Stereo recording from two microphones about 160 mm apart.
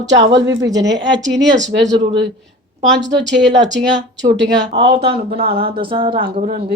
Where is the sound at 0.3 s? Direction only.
90° right.